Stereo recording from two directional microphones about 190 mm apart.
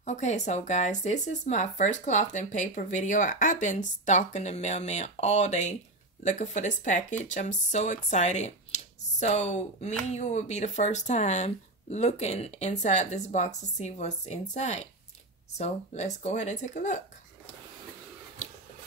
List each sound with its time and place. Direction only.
0.0 s speech: 40° left (ahead or behind)